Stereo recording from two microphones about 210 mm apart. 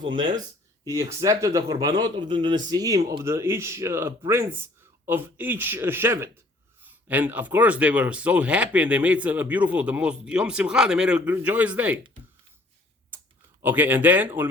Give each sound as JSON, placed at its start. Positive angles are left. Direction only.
{"t": 0.9, "sound": "speech", "side_deg": -15}
{"t": 13.6, "sound": "speech", "side_deg": -10}